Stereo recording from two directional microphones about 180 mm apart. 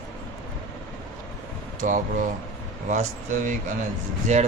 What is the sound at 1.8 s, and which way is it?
Speech, 45° right (ahead or behind).